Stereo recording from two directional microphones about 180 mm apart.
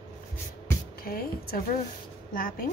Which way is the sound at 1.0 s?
55° left (ahead or behind).